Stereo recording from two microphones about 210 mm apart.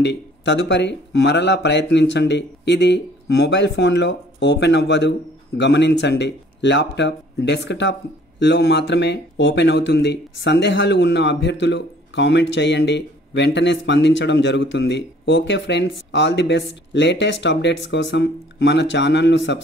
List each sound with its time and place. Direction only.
0.0 s speech: 55° left (ahead or behind)